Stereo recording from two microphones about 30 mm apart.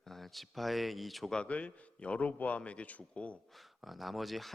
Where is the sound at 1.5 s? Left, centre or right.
Left.